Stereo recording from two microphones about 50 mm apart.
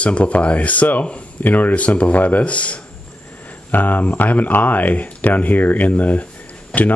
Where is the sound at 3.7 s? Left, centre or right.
Left.